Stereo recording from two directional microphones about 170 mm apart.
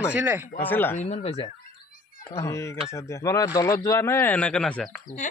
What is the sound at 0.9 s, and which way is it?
Speech, 40° left (ahead or behind).